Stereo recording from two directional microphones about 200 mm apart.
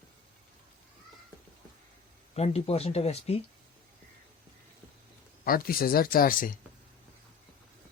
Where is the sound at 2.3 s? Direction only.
30° left (ahead or behind).